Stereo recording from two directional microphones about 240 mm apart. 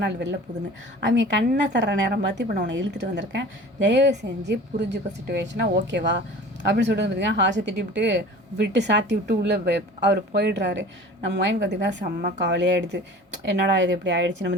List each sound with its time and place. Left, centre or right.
0.0 s speech: right